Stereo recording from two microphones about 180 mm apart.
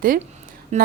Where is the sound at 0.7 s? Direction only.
40° right (ahead or behind).